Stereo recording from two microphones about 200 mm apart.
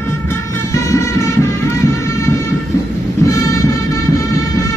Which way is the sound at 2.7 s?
15° left (ahead or behind).